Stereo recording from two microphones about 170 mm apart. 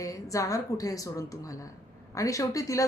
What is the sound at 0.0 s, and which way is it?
A woman's voice, 20° left (ahead or behind).